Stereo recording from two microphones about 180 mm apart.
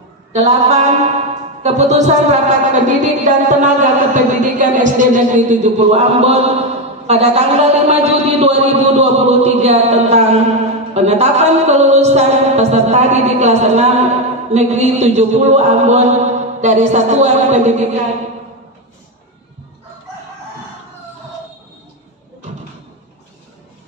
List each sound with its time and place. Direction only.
0.3 s speech: 35° right (ahead or behind)